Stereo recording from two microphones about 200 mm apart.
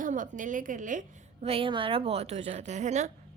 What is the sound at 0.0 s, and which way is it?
Speech, 40° right (ahead or behind).